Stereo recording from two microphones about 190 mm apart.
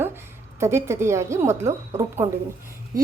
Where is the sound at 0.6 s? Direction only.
15° right (ahead or behind).